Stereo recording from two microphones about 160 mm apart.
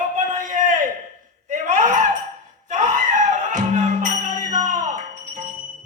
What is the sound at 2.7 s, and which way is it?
Music, 50° right (ahead or behind).